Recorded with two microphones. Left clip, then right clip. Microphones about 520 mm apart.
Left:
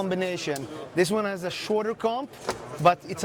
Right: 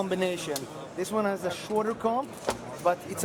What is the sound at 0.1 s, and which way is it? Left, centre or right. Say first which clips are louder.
Speech: left 1 dB; left.